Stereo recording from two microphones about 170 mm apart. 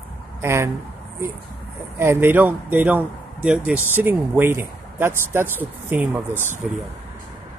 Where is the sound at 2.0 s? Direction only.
15° right (ahead or behind).